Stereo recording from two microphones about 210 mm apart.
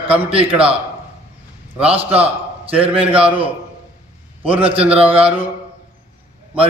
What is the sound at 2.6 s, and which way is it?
Speech, 25° right (ahead or behind).